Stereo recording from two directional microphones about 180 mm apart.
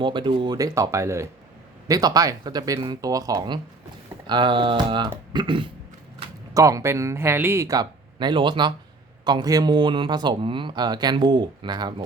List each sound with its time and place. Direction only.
0.0 s speech: 25° right (ahead or behind)